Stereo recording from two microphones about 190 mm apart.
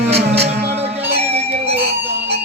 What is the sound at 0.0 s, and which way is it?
Music, 30° right (ahead or behind).